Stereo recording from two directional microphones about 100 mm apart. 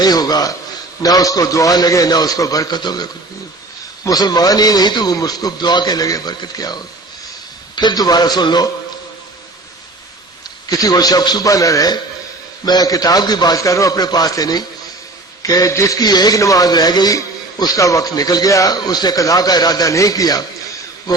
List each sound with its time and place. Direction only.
0.0 s a sound: 40° left (ahead or behind)
1.0 s a man's voice: 35° left (ahead or behind)
10.7 s a man's voice: 40° left (ahead or behind)